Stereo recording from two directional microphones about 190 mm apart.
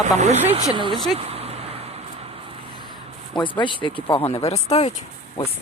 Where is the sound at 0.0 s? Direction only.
35° right (ahead or behind).